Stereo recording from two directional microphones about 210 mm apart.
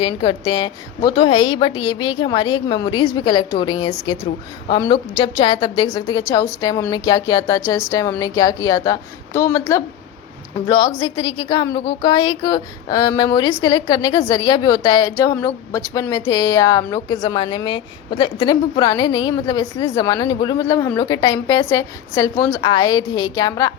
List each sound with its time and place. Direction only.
0.0 s a woman's voice: 20° left (ahead or behind)
11.0 s a woman's voice: 20° left (ahead or behind)